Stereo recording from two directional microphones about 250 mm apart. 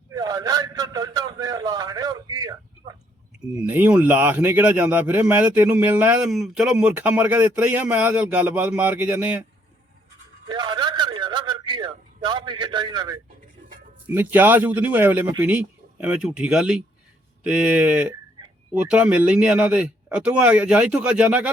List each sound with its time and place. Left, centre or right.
0.1 s a sound: centre
3.5 s speech: centre
10.5 s a man's voice: centre